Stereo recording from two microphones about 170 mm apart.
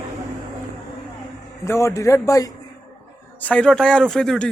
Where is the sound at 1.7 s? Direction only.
15° left (ahead or behind).